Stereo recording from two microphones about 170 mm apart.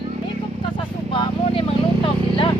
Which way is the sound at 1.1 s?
30° left (ahead or behind).